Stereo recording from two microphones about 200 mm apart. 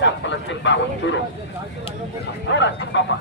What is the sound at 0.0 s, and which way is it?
Speech, 65° left (ahead or behind).